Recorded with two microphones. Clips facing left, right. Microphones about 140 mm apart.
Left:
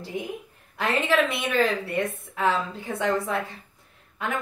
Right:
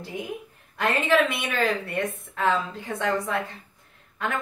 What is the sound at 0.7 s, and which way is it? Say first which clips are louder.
Speech: right 1 dB; centre (ahead or behind).